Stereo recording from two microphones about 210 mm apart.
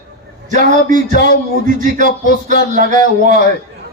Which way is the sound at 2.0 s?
45° left (ahead or behind).